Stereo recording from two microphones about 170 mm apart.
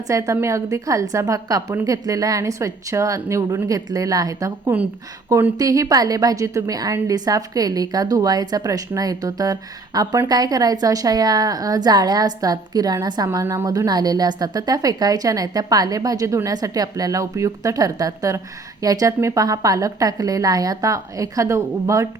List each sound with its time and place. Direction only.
0.1 s a woman's voice: 20° right (ahead or behind)